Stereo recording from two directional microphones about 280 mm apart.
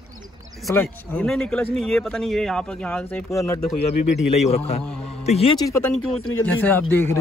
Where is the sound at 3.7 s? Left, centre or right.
Left.